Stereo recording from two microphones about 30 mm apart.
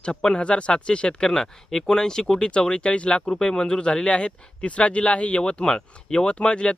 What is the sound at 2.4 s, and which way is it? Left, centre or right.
Speech, left.